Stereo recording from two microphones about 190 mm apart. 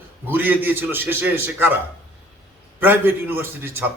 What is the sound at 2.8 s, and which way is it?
A man's voice, 10° right (ahead or behind).